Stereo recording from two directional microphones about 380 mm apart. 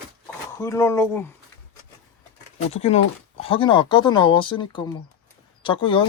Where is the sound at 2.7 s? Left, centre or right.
Centre.